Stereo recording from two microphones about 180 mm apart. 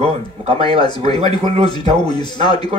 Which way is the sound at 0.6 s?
25° left (ahead or behind).